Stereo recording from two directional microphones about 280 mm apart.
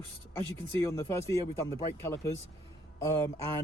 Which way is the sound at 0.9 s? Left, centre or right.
Centre.